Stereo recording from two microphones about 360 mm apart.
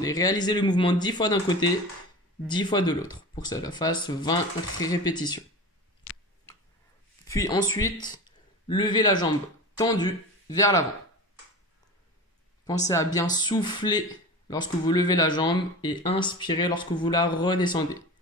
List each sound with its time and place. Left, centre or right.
0.0 s speech: centre
6.0 s a sound: left
7.2 s speech: centre
12.6 s speech: centre